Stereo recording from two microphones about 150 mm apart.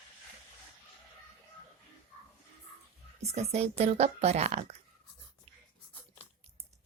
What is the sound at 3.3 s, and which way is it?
A woman's voice, 45° right (ahead or behind).